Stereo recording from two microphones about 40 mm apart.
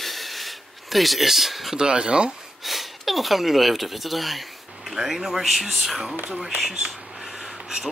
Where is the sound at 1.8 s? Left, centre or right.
Right.